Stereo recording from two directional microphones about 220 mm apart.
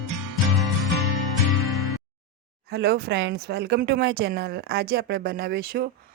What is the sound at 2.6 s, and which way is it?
A woman's voice, 45° right (ahead or behind).